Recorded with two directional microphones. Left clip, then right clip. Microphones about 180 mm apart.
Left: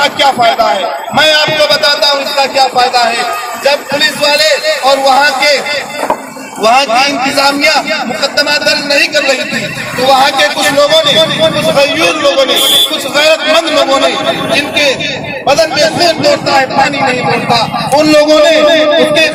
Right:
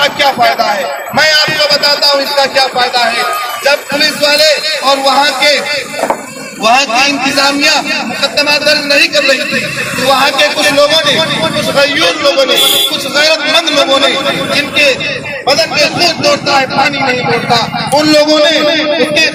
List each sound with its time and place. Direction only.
0.0 s a man's voice: 20° left (ahead or behind)
6.6 s a man's voice: 15° left (ahead or behind)